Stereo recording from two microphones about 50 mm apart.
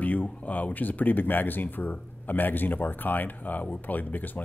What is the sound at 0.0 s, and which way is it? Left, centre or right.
Speech, left.